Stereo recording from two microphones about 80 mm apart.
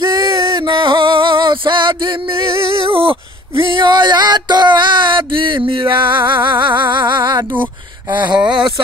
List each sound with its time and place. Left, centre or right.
0.0 s music: right
0.5 s music: right
7.6 s a sound: right